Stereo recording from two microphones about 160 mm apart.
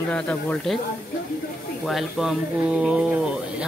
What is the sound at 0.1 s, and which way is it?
Speech, 10° left (ahead or behind).